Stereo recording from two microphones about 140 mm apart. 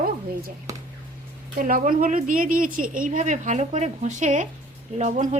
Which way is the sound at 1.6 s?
90° right.